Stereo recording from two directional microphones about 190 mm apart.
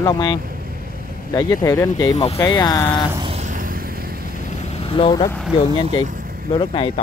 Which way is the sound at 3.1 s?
30° right (ahead or behind).